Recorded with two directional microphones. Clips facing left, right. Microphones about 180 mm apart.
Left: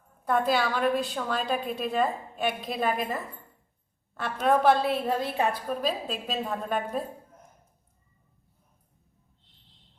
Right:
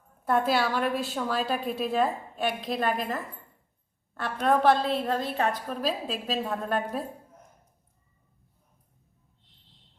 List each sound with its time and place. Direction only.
0.3 s a woman's voice: 5° right (ahead or behind)